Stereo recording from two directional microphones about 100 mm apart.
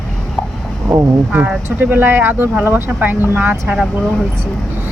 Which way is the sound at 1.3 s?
15° right (ahead or behind).